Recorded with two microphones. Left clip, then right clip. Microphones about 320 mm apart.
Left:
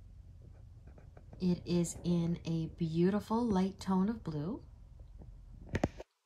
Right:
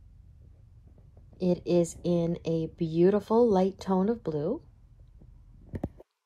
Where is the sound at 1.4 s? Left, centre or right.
Centre.